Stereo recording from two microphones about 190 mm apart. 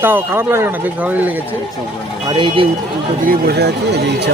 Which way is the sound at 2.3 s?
25° right (ahead or behind).